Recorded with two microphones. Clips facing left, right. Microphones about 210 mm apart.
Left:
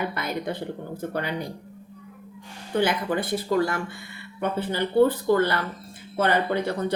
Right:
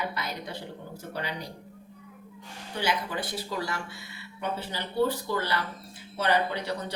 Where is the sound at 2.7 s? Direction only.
55° left (ahead or behind).